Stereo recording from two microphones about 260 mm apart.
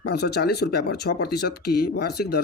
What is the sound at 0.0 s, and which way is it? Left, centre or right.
Speech, left.